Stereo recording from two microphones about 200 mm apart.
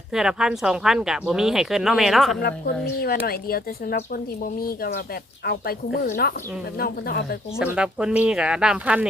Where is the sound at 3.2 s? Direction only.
50° left (ahead or behind).